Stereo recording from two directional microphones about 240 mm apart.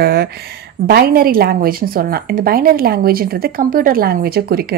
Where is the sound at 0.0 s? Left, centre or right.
Right.